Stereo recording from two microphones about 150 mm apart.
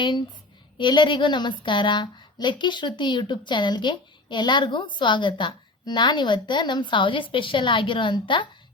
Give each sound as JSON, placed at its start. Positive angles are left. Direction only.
{"t": 0.8, "sound": "speech", "side_deg": 30}